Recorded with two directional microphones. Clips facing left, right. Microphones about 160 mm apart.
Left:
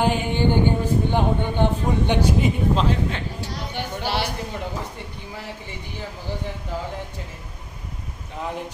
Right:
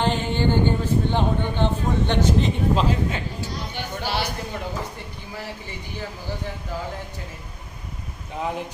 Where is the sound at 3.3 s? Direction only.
65° left (ahead or behind).